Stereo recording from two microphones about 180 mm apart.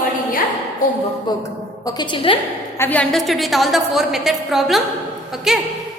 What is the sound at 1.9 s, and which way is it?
Speech, 25° left (ahead or behind).